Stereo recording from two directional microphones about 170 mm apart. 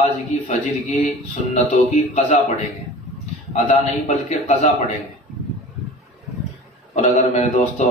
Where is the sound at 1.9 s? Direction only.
45° left (ahead or behind).